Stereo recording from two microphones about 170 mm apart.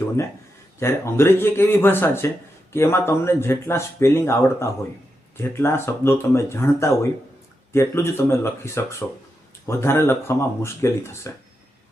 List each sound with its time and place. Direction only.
0.8 s speech: 15° left (ahead or behind)